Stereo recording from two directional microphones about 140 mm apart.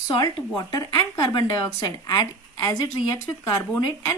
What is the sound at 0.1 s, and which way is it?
Speech, 30° left (ahead or behind).